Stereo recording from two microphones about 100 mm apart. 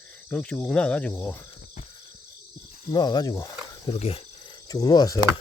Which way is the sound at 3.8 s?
70° left (ahead or behind).